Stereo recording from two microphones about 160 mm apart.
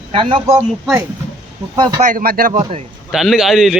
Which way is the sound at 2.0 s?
55° right (ahead or behind).